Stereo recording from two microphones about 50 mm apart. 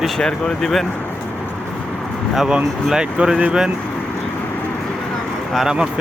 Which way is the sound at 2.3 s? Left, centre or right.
Centre.